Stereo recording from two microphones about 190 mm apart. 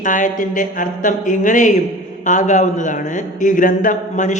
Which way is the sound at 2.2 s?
40° left (ahead or behind).